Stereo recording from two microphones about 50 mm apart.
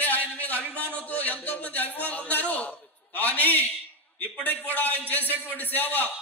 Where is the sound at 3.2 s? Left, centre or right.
Left.